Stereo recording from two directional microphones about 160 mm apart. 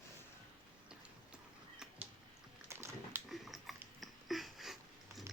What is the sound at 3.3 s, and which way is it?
Dog, centre (ahead or behind).